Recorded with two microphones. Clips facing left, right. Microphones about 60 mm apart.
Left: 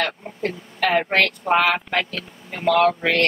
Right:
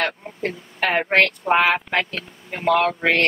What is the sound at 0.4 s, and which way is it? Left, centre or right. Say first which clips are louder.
A woman's voice: left 1 dB; right.